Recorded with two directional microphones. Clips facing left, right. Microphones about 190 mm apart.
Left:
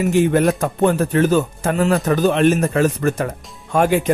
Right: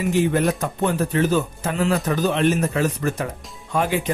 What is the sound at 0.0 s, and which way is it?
Speech, 50° left (ahead or behind).